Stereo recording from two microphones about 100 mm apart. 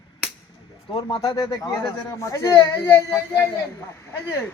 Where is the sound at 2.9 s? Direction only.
25° left (ahead or behind).